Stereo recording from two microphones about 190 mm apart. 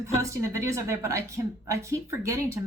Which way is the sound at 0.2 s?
15° right (ahead or behind).